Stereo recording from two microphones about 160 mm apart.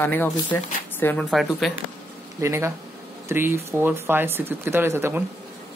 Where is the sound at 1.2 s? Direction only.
Centre (ahead or behind).